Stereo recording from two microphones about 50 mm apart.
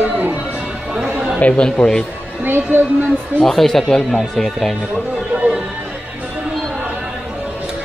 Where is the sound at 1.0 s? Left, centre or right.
Right.